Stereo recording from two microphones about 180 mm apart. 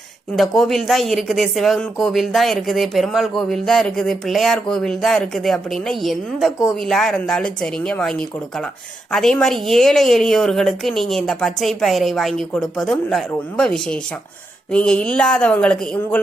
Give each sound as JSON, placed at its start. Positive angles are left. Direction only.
{"t": 0.3, "sound": "speech", "side_deg": 0}
{"t": 9.1, "sound": "speech", "side_deg": 0}